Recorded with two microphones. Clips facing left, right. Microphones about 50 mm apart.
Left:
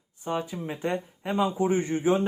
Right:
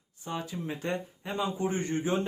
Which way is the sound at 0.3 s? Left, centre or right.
Left.